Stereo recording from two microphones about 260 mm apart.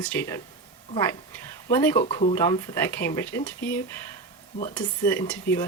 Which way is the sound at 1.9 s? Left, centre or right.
Left.